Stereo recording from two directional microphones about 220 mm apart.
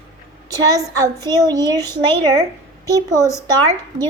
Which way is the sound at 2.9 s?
15° right (ahead or behind).